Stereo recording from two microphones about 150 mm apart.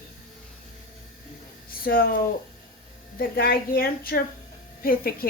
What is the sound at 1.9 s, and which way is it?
A woman's voice, 75° left (ahead or behind).